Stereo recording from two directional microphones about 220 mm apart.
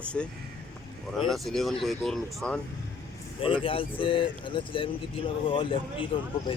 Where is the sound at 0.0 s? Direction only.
5° left (ahead or behind).